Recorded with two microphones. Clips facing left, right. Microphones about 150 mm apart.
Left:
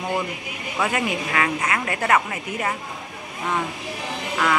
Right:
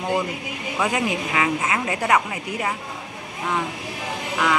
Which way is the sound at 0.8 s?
15° right (ahead or behind).